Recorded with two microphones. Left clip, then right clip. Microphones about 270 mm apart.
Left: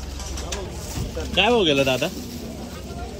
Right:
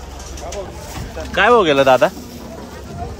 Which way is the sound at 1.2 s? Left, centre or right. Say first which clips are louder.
Right 6 dB; centre.